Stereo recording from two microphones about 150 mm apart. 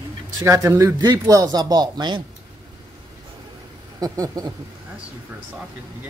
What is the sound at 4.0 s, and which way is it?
Speech, 25° right (ahead or behind).